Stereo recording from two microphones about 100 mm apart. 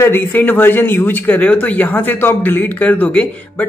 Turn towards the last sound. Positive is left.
turn(degrees=15)  # may be behind; listen again after turning